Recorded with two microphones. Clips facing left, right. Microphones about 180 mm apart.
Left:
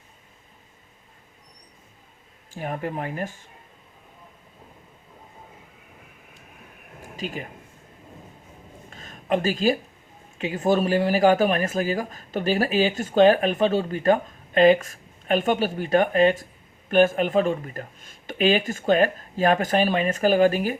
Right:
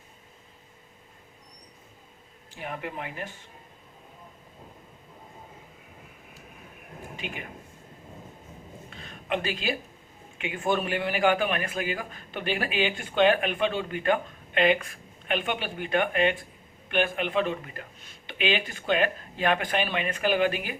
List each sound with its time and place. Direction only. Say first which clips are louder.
2.6 s speech: left 6 dB; 45° left (ahead or behind)
7.2 s a man's voice: left 7 dB; 40° left (ahead or behind)
8.9 s a sound: left 6 dB; 45° left (ahead or behind)
10.3 s a man's voice: left 6 dB; 40° left (ahead or behind)